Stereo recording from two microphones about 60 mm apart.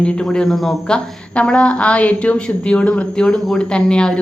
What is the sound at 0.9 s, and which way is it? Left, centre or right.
Speech, centre.